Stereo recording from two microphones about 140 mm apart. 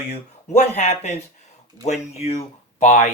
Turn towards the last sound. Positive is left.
turn(degrees=55)  # may be behind; listen again after turning